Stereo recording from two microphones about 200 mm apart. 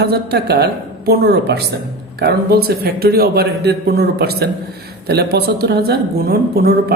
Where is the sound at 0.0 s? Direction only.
50° right (ahead or behind).